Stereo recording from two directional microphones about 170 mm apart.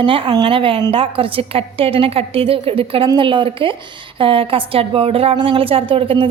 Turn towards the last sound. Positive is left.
turn(degrees=-30)  # may be behind; listen again after turning